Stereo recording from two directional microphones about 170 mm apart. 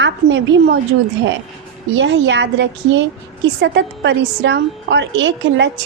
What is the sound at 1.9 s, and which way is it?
A woman's voice, 90° right.